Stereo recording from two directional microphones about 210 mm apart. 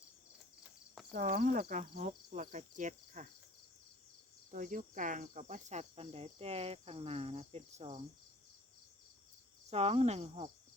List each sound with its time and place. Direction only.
1.1 s speech: 40° right (ahead or behind)
4.5 s speech: 40° right (ahead or behind)
9.6 s speech: 30° right (ahead or behind)